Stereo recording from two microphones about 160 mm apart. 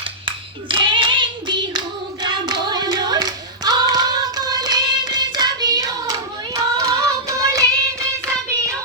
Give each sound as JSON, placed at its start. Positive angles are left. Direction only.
{"t": 0.3, "sound": "clapping", "side_deg": -30}
{"t": 2.2, "sound": "hands", "side_deg": -25}